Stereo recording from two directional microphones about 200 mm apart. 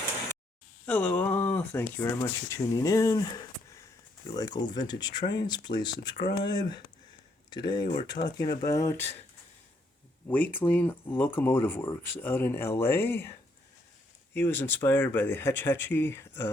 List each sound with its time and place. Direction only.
0.9 s speech: 10° left (ahead or behind)
10.2 s speech: 10° left (ahead or behind)
14.3 s speech: 10° left (ahead or behind)